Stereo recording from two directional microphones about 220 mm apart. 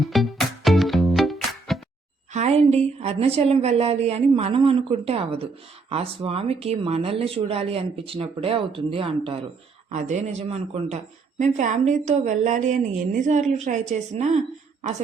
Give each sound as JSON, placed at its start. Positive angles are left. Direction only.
{"t": 0.0, "sound": "music", "side_deg": 0}
{"t": 2.3, "sound": "a woman's voice", "side_deg": -30}